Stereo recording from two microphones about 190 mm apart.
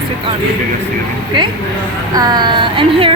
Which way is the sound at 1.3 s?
25° right (ahead or behind).